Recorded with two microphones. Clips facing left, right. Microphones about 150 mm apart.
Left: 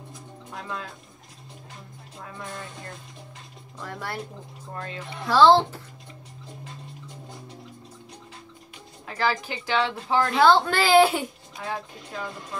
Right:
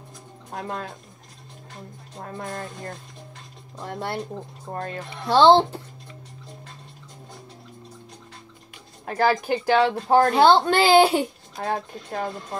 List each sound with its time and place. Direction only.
0.5 s speech: 45° right (ahead or behind)
2.1 s speech: 45° right (ahead or behind)
3.7 s a woman's voice: 30° right (ahead or behind)
4.6 s speech: 45° right (ahead or behind)
5.2 s a woman's voice: 30° right (ahead or behind)
9.0 s speech: 50° right (ahead or behind)
10.3 s a woman's voice: 30° right (ahead or behind)
11.5 s speech: 45° right (ahead or behind)